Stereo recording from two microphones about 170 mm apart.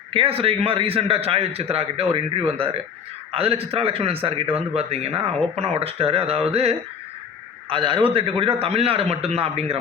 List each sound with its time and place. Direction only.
0.1 s speech: 35° right (ahead or behind)